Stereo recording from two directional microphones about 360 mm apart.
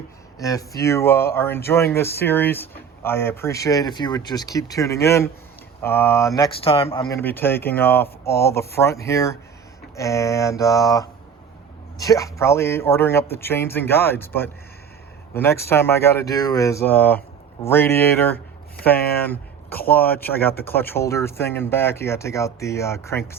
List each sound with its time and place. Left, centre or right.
0.3 s speech: centre
18.9 s speech: left
19.2 s a sound: centre
19.9 s speech: centre